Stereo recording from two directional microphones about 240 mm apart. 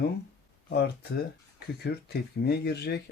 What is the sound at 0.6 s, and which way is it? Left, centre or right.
Speech, left.